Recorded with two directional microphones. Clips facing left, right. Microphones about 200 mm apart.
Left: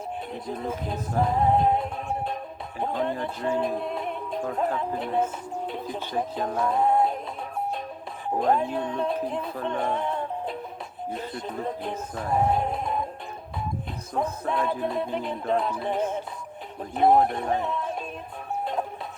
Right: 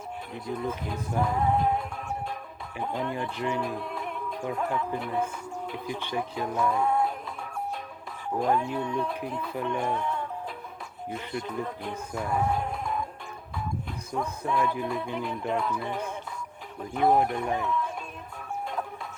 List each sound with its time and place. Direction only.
0.5 s speech: 25° left (ahead or behind)
1.5 s music: 25° left (ahead or behind)
2.8 s speech: 35° left (ahead or behind)
8.5 s speech: 25° left (ahead or behind)
9.6 s music: 25° left (ahead or behind)
11.4 s speech: 25° left (ahead or behind)
12.5 s music: 25° left (ahead or behind)
14.2 s speech: 25° left (ahead or behind)
17.2 s speech: 30° left (ahead or behind)
18.6 s music: 25° left (ahead or behind)